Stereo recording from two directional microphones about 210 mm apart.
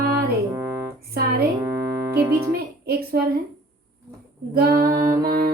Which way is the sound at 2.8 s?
50° right (ahead or behind).